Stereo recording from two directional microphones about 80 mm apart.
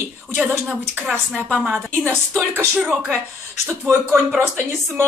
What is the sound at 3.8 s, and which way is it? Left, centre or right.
Speech, right.